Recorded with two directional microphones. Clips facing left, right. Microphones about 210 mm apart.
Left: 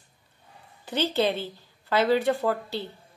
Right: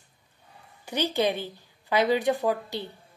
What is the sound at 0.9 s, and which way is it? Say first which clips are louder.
Speech: left 1 dB; 15° right (ahead or behind).